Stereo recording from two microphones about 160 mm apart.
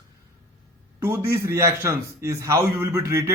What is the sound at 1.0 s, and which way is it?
A man's voice, 15° right (ahead or behind).